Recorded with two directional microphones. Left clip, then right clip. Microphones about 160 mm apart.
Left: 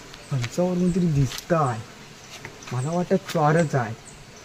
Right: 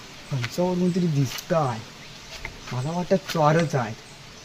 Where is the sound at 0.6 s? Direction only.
55° left (ahead or behind).